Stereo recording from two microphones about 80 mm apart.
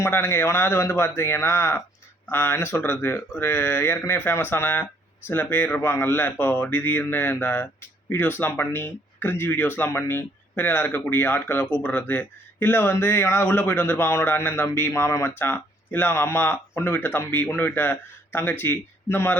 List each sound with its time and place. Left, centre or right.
0.0 s a man's voice: left